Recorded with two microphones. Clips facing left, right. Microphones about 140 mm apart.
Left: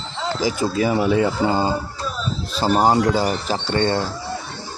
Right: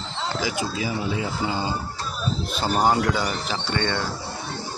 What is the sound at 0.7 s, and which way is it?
Speech, 60° left (ahead or behind).